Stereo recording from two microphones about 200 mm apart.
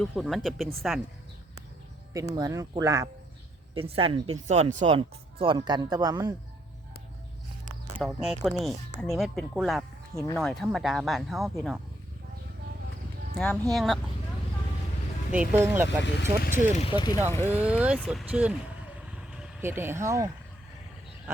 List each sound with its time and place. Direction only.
0.0 s speech: centre (ahead or behind)
2.1 s speech: 15° right (ahead or behind)
3.8 s speech: 30° right (ahead or behind)
7.9 s speech: 5° right (ahead or behind)
13.3 s speech: 5° left (ahead or behind)
15.3 s speech: 10° right (ahead or behind)
16.4 s speech: 40° left (ahead or behind)
16.8 s speech: 25° left (ahead or behind)
17.6 s speech: 5° right (ahead or behind)